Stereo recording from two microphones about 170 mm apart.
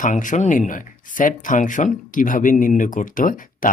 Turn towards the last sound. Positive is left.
turn(degrees=50)  # may be behind; listen again after turning